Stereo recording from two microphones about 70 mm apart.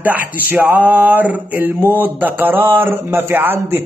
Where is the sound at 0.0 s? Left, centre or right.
Right.